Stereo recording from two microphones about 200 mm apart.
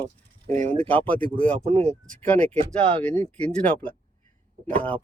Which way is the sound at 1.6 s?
35° right (ahead or behind).